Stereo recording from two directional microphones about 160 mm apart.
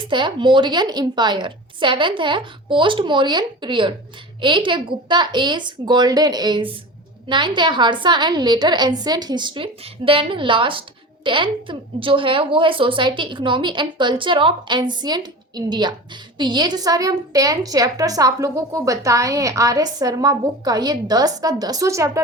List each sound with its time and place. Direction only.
0.1 s a woman's voice: 30° right (ahead or behind)